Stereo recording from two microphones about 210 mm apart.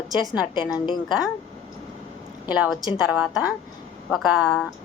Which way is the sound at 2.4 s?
5° right (ahead or behind).